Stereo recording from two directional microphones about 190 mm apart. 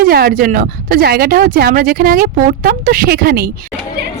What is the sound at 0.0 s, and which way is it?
Speech, 50° right (ahead or behind).